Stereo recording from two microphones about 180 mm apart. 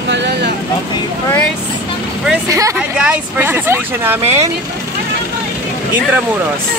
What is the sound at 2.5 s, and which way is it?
Speech, 20° right (ahead or behind).